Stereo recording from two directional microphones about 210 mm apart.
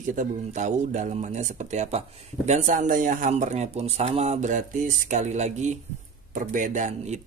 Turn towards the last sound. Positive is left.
turn(degrees=-35)  # may be behind; listen again after turning